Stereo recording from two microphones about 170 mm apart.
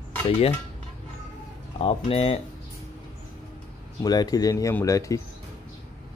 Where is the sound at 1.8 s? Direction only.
35° left (ahead or behind).